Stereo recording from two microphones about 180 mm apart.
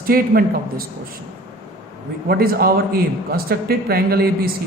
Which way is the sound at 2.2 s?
55° right (ahead or behind).